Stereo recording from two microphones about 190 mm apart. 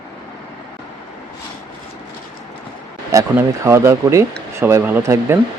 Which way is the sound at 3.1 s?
15° right (ahead or behind).